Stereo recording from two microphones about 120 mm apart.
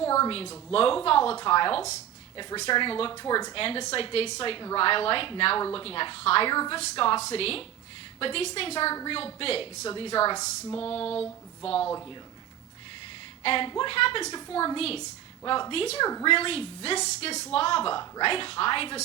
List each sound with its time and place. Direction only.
0.0 s speech: 25° left (ahead or behind)
0.7 s a woman's voice: 50° left (ahead or behind)
3.1 s speech: 35° left (ahead or behind)
3.5 s a woman's voice: 50° left (ahead or behind)
6.5 s a woman's voice: 40° left (ahead or behind)
11.1 s a sound: 10° left (ahead or behind)
13.4 s a woman's voice: 50° left (ahead or behind)
14.3 s speech: 35° left (ahead or behind)
14.8 s a woman's voice: 55° left (ahead or behind)